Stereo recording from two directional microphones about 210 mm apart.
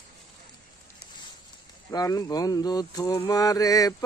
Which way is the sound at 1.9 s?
15° left (ahead or behind).